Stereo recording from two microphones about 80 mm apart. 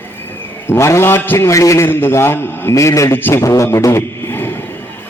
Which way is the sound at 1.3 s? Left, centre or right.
Left.